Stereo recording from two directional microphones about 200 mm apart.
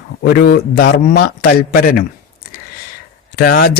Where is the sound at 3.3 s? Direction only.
50° left (ahead or behind).